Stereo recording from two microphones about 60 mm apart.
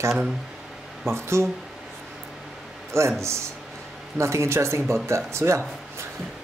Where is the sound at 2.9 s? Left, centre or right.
Right.